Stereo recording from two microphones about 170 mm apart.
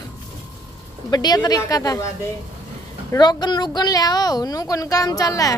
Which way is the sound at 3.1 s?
25° left (ahead or behind).